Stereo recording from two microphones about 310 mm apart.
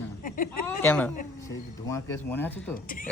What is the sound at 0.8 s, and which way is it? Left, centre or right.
Speech, centre.